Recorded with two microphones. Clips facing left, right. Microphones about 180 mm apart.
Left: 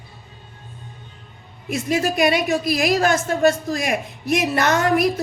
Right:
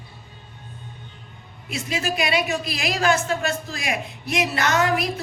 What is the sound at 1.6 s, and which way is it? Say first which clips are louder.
Speech: left 6 dB; 50° left (ahead or behind).